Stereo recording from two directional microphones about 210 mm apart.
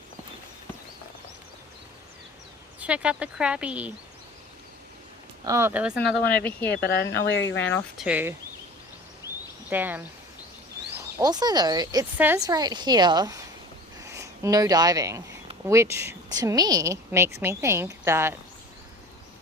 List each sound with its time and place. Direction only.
2.8 s speech: 5° right (ahead or behind)
5.5 s a woman's voice: 10° right (ahead or behind)
6.3 s speech: 10° left (ahead or behind)
6.8 s speech: 50° left (ahead or behind)
7.6 s speech: 5° left (ahead or behind)
8.0 s a woman's voice: 10° right (ahead or behind)
9.6 s a woman's voice: 10° right (ahead or behind)
11.2 s a woman's voice: 20° right (ahead or behind)